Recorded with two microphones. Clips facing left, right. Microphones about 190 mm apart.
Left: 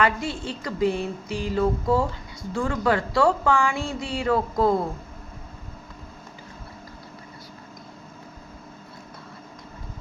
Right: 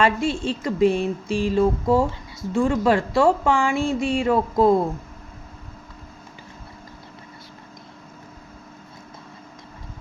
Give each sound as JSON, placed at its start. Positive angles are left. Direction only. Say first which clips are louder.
{"t": 0.0, "sound": "speech", "louder": "right 4 dB", "side_deg": -25}